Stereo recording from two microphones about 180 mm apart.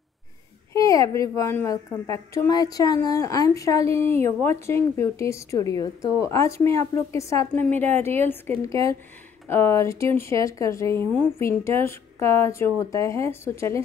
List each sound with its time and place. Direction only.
0.7 s a woman's voice: 20° left (ahead or behind)